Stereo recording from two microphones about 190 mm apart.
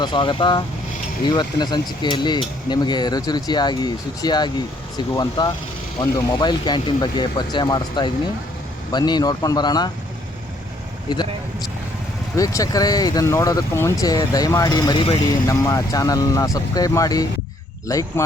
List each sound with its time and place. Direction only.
0.0 s speech: 25° left (ahead or behind)
12.4 s speech: 20° left (ahead or behind)